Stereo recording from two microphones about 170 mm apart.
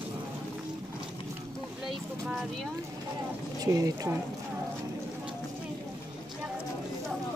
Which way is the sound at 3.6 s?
20° right (ahead or behind).